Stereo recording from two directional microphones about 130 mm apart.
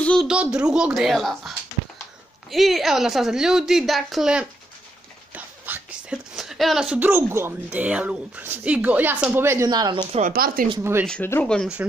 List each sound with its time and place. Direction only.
0.0 s a sound: 5° left (ahead or behind)
0.3 s a woman's voice: 5° right (ahead or behind)
2.5 s a woman's voice: centre (ahead or behind); by 9.7 s 20° right (ahead or behind)
9.7 s speech: 35° right (ahead or behind)
10.2 s speech: 90° right
10.8 s speech: 20° right (ahead or behind)
11.4 s a woman's voice: 5° left (ahead or behind)